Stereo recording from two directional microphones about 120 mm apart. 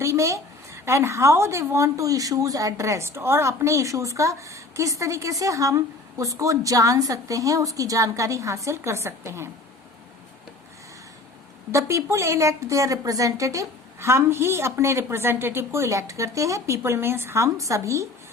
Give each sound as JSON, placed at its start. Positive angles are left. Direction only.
{"t": 0.0, "sound": "a woman's voice", "side_deg": -25}
{"t": 11.7, "sound": "a woman's voice", "side_deg": -25}